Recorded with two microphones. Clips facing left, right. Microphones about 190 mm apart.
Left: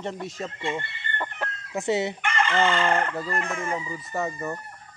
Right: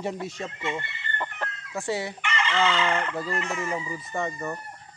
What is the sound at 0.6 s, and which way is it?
Speech, 30° left (ahead or behind).